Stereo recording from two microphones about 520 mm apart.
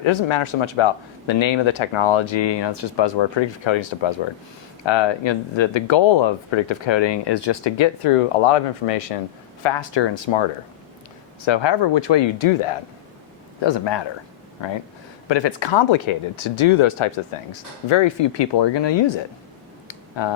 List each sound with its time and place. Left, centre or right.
0.0 s speech: left
8.0 s speech: left
9.6 s speech: left
11.4 s speech: left
13.6 s speech: left
19.9 s a sound: left